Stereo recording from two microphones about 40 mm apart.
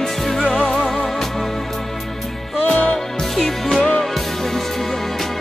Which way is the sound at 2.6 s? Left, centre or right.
Left.